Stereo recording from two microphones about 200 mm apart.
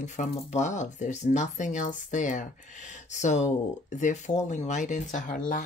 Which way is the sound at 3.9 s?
35° left (ahead or behind).